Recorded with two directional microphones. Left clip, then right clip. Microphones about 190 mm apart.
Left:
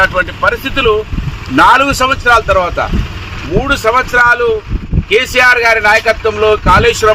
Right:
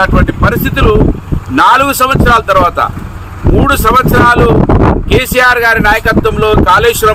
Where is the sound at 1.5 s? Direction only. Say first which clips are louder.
Even; 15° right (ahead or behind).